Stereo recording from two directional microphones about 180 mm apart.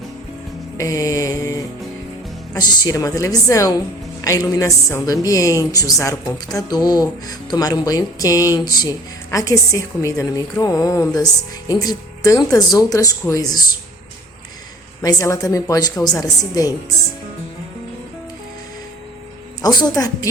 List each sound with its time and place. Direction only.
0.8 s mantra: 20° left (ahead or behind)
2.5 s a woman's voice: 20° left (ahead or behind)
15.0 s speech: 15° left (ahead or behind)
19.6 s speech: 20° left (ahead or behind)